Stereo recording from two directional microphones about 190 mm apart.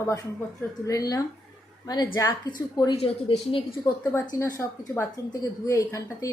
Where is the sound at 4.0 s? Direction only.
15° left (ahead or behind).